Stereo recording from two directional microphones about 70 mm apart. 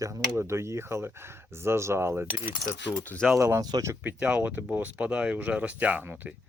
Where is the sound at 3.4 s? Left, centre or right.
Right.